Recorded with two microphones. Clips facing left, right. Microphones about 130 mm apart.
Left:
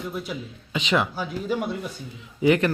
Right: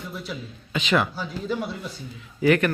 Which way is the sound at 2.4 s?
20° left (ahead or behind).